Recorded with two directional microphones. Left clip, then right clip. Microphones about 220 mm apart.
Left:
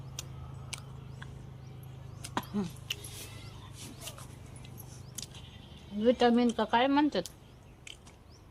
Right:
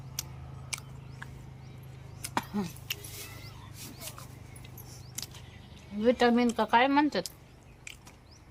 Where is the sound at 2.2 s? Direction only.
5° right (ahead or behind).